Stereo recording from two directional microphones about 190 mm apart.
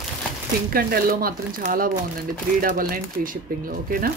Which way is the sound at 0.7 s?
50° right (ahead or behind).